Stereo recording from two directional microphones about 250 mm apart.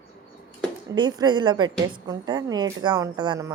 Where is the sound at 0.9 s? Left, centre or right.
Centre.